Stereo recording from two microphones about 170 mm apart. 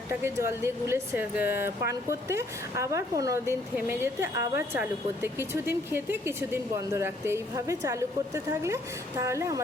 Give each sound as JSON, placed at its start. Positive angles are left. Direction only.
{"t": 0.1, "sound": "speech", "side_deg": -15}